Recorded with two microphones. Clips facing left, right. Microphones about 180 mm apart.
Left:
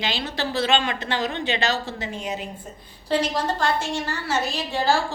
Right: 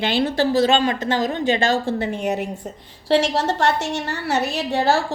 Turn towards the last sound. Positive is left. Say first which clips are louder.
# right 3 dB
turn(degrees=-65)  # may be behind; listen again after turning